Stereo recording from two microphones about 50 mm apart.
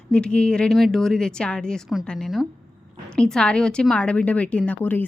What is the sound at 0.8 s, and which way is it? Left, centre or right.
A woman's voice, centre.